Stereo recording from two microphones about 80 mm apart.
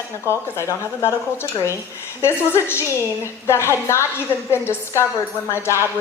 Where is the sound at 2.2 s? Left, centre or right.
Left.